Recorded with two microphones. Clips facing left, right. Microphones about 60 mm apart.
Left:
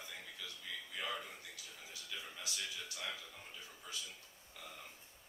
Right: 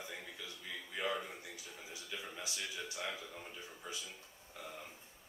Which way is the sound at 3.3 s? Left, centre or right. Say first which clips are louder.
Right 4 dB; right.